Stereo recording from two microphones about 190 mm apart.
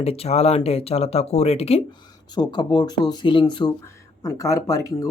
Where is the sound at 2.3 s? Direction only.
20° left (ahead or behind).